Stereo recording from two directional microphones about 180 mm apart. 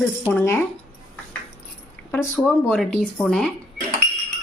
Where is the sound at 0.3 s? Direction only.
10° left (ahead or behind).